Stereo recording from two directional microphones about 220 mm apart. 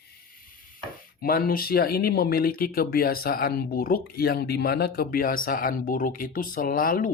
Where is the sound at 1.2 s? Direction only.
40° left (ahead or behind).